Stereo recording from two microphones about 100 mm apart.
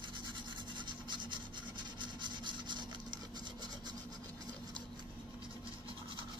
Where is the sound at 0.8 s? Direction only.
55° right (ahead or behind).